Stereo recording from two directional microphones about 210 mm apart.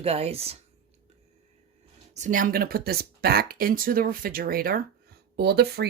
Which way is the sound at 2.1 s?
35° right (ahead or behind).